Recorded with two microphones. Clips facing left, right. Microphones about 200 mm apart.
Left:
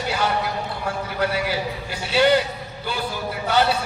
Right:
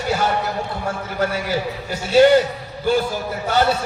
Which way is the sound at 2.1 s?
45° right (ahead or behind).